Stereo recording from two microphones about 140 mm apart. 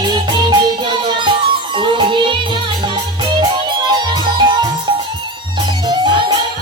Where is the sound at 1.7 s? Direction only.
35° right (ahead or behind).